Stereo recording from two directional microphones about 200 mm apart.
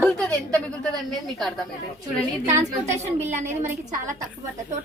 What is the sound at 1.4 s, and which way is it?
Speech, centre (ahead or behind).